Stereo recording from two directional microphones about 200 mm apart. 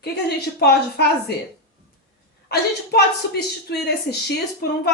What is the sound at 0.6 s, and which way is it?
Speech, 55° left (ahead or behind).